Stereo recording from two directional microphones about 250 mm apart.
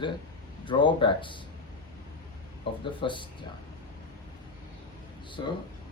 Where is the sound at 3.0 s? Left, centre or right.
Centre.